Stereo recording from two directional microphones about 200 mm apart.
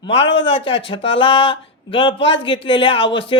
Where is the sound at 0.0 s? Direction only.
25° left (ahead or behind).